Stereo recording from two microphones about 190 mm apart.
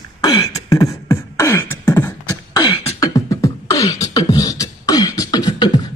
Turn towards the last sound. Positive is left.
turn(degrees=20)  # may be behind; listen again after turning